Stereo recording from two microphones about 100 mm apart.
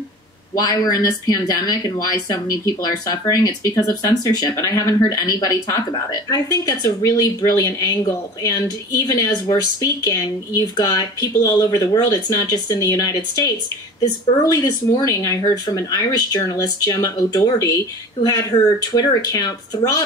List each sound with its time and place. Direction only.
0.6 s speech: 40° left (ahead or behind)
14.4 s speech: 40° left (ahead or behind)